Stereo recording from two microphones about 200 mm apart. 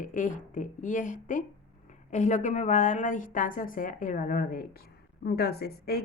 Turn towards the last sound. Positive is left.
turn(degrees=50)  # may be behind; listen again after turning